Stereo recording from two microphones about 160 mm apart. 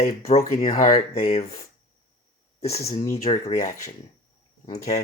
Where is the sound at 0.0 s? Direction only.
45° left (ahead or behind).